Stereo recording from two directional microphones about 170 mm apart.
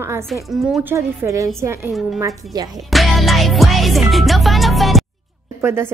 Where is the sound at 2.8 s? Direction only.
Centre (ahead or behind).